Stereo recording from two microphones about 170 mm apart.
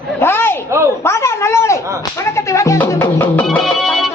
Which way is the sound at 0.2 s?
15° left (ahead or behind).